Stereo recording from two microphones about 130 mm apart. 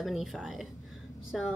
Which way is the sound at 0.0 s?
Centre (ahead or behind).